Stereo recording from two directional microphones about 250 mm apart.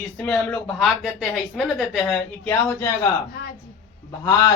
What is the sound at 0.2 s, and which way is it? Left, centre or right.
Speech, centre.